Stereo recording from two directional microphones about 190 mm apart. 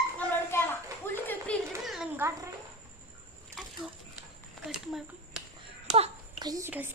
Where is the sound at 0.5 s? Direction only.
15° left (ahead or behind).